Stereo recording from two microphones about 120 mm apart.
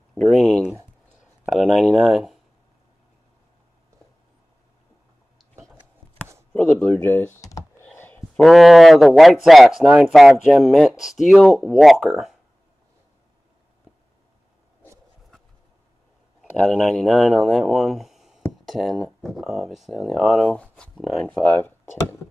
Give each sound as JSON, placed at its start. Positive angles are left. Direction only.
{"t": 0.1, "sound": "speech", "side_deg": 0}
{"t": 6.5, "sound": "speech", "side_deg": 10}
{"t": 7.0, "sound": "speech", "side_deg": 15}
{"t": 7.8, "sound": "a sound", "side_deg": 15}
{"t": 8.4, "sound": "speech", "side_deg": 0}
{"t": 16.3, "sound": "speech", "side_deg": 5}